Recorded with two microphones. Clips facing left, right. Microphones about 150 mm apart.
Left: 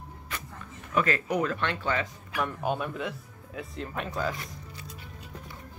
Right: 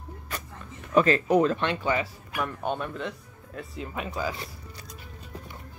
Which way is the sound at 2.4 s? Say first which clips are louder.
Even; 5° left (ahead or behind).